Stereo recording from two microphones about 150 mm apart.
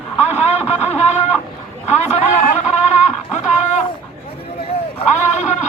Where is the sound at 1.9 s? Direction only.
50° left (ahead or behind).